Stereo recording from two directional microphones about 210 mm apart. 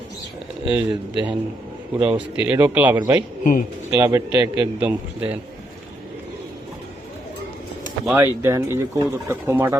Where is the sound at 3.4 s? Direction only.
40° left (ahead or behind).